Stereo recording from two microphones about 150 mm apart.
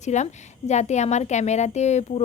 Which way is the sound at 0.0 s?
50° left (ahead or behind).